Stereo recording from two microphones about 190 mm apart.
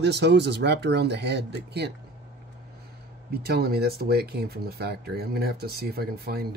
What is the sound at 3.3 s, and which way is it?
Speech, 55° right (ahead or behind).